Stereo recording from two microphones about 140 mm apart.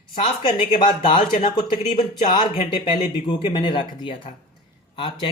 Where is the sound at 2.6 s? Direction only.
35° left (ahead or behind).